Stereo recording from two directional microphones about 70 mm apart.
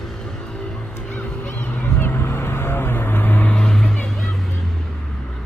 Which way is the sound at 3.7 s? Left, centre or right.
Centre.